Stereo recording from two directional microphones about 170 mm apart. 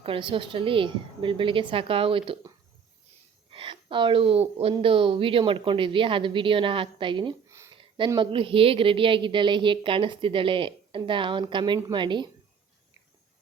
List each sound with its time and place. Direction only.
0.0 s a woman's voice: 30° right (ahead or behind)
3.5 s a woman's voice: 30° right (ahead or behind)